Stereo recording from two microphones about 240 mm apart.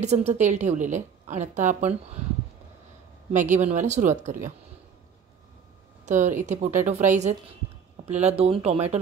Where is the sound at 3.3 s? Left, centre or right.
Right.